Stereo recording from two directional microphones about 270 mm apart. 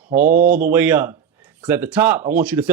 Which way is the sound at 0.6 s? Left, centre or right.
Centre.